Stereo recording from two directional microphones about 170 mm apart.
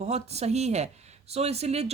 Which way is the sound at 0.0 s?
40° right (ahead or behind).